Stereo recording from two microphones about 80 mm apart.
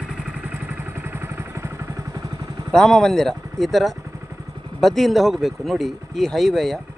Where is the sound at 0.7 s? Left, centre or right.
Right.